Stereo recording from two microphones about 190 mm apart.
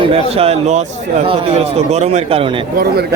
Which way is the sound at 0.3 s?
30° right (ahead or behind).